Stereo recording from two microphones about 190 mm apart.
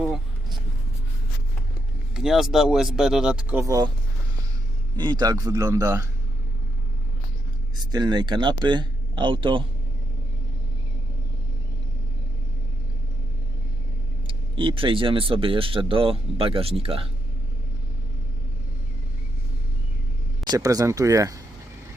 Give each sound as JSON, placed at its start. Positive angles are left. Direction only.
{"t": 2.1, "sound": "speech", "side_deg": 0}
{"t": 4.9, "sound": "speech", "side_deg": -25}
{"t": 7.9, "sound": "speech", "side_deg": -25}
{"t": 14.3, "sound": "speech", "side_deg": -25}
{"t": 20.4, "sound": "speech", "side_deg": -20}